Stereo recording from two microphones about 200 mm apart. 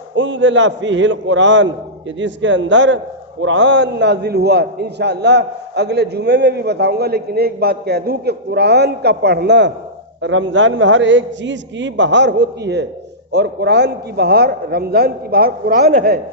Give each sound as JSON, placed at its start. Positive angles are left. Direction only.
{"t": 0.2, "sound": "a man's voice", "side_deg": -65}